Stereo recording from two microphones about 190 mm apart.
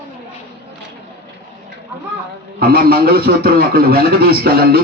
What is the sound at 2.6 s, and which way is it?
A man's voice, 50° right (ahead or behind).